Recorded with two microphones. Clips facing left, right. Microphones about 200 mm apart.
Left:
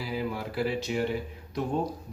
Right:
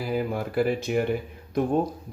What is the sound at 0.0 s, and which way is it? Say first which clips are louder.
Speech: right 5 dB; 50° right (ahead or behind).